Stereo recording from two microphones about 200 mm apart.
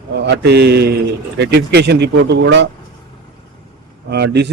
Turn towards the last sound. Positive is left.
turn(degrees=-55)  # may be behind; listen again after turning